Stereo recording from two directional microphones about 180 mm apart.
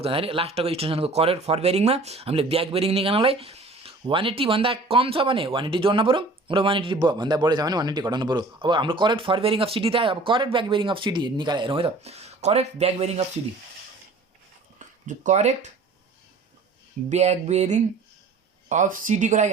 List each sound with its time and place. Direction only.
0.0 s speech: 30° right (ahead or behind)
14.8 s speech: 45° right (ahead or behind)
17.1 s a sound: 35° right (ahead or behind)
18.7 s speech: 45° right (ahead or behind)